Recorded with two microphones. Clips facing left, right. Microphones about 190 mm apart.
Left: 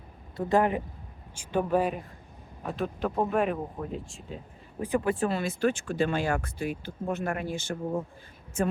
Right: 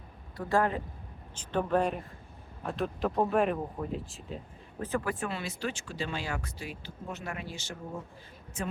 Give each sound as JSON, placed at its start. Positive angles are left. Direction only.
{"t": 0.3, "sound": "speech", "side_deg": 20}
{"t": 4.8, "sound": "speech", "side_deg": 15}
{"t": 5.1, "sound": "speech", "side_deg": 30}
{"t": 5.4, "sound": "speech", "side_deg": 50}